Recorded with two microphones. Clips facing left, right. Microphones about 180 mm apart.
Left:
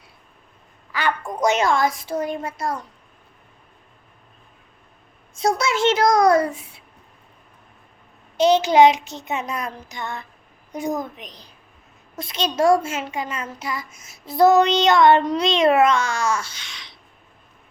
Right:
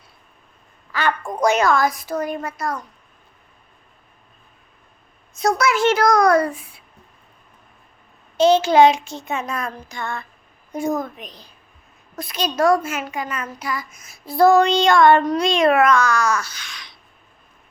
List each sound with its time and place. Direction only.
0.9 s a sound: 15° left (ahead or behind)
1.4 s a child's voice: 25° left (ahead or behind)
5.4 s a child's voice: 25° left (ahead or behind)
8.4 s a child's voice: 15° left (ahead or behind)